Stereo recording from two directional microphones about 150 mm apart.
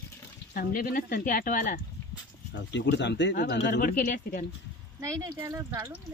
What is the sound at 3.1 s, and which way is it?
Speech, 90° left.